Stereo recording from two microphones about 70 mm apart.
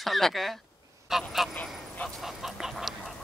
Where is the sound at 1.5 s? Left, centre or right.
Left.